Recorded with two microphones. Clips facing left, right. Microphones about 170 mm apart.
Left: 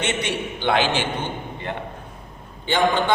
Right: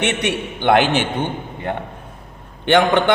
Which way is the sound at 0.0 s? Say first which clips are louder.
Right 4 dB; 65° right (ahead or behind).